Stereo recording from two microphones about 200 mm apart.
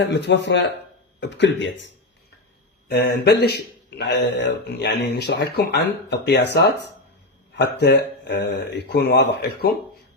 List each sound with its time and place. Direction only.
0.1 s a man's voice: 60° left (ahead or behind)
2.9 s a man's voice: 55° left (ahead or behind)